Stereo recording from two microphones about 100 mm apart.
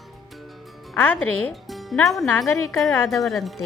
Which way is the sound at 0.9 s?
20° left (ahead or behind).